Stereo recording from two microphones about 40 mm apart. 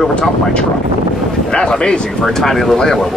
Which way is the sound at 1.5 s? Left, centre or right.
Centre.